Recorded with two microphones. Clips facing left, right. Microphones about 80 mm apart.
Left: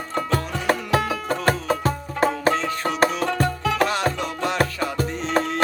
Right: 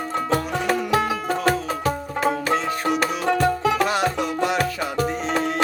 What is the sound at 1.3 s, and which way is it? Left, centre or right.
Music, left.